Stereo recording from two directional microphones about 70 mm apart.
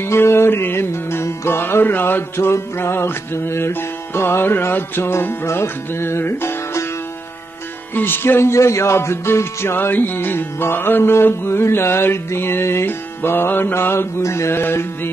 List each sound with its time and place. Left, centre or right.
0.0 s speech: left
7.9 s speech: left